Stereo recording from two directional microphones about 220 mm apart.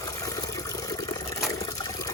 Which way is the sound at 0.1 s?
15° left (ahead or behind).